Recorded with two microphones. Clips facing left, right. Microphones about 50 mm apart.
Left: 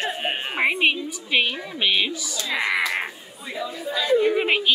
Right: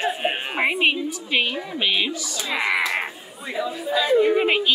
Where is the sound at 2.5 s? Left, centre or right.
Centre.